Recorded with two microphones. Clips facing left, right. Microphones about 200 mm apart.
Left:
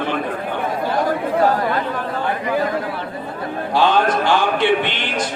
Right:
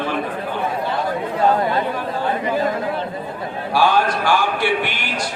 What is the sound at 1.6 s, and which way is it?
Speech, 20° right (ahead or behind).